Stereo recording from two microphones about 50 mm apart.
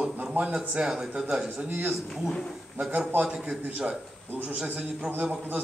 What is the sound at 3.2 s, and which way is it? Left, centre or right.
Speech, centre.